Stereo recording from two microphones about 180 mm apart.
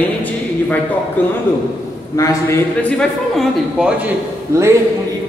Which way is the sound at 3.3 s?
Centre (ahead or behind).